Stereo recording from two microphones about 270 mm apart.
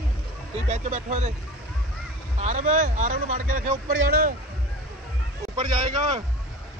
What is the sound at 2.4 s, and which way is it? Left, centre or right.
Speech, right.